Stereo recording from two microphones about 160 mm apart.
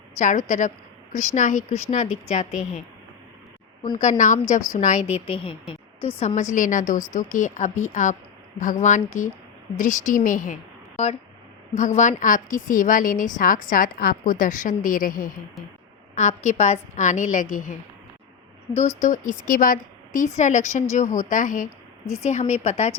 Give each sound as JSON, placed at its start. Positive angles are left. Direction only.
{"t": 0.2, "sound": "speech", "side_deg": 50}
{"t": 3.8, "sound": "a woman's voice", "side_deg": 25}
{"t": 4.2, "sound": "a woman's voice", "side_deg": 50}
{"t": 16.1, "sound": "speech", "side_deg": 45}
{"t": 18.9, "sound": "speech", "side_deg": 55}